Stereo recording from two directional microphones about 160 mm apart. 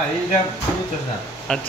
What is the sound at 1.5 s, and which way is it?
Speech, 5° left (ahead or behind).